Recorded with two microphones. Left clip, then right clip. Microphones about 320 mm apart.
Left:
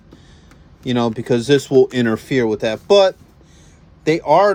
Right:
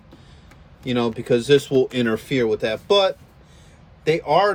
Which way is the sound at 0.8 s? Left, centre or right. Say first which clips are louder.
Left 3 dB; centre.